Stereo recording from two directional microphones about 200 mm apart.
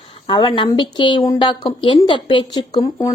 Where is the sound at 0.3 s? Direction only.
25° left (ahead or behind).